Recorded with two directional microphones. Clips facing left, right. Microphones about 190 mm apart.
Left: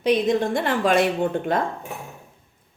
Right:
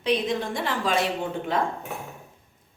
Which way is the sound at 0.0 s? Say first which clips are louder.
Left 5 dB; 45° left (ahead or behind).